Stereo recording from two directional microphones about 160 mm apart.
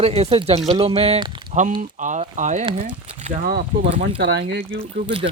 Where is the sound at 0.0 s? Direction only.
40° right (ahead or behind).